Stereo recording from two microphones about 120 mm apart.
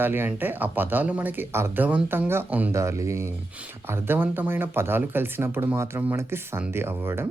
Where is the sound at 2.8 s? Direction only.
25° right (ahead or behind).